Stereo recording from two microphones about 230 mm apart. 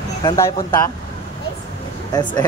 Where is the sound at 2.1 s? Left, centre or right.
Centre.